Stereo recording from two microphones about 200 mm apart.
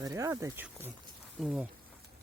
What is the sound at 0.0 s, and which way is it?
Speech, 15° right (ahead or behind).